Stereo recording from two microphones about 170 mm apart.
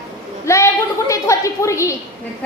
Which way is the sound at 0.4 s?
15° left (ahead or behind).